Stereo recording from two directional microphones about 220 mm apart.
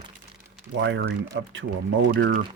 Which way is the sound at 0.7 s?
55° right (ahead or behind).